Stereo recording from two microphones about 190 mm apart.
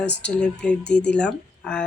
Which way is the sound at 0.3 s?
5° left (ahead or behind).